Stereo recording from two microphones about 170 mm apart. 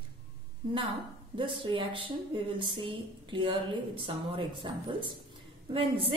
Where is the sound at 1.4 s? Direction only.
30° right (ahead or behind).